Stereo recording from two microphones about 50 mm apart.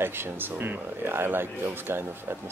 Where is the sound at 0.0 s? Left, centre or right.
Right.